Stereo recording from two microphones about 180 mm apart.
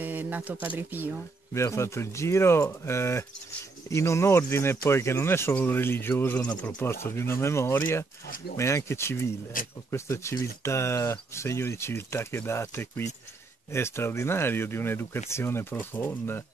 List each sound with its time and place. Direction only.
0.0 s speech: 10° right (ahead or behind)
1.5 s speech: 15° left (ahead or behind)